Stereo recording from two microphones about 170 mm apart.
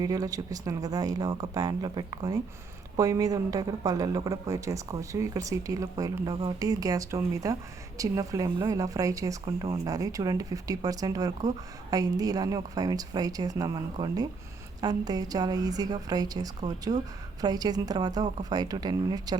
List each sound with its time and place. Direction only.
0.0 s speech: 20° right (ahead or behind)